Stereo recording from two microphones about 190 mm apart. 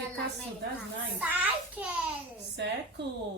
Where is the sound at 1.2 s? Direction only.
10° right (ahead or behind).